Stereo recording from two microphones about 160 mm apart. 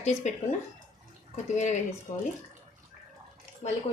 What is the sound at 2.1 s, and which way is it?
Speech, 45° left (ahead or behind).